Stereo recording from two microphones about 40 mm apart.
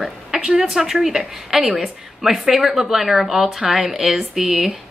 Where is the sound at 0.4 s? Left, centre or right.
Right.